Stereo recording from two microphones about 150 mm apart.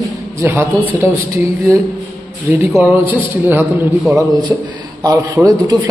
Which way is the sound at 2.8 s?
10° right (ahead or behind).